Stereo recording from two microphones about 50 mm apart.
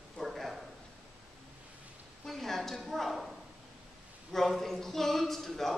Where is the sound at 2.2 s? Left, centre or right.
Centre.